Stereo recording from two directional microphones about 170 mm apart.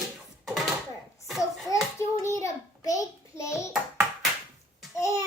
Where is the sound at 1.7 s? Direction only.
20° left (ahead or behind).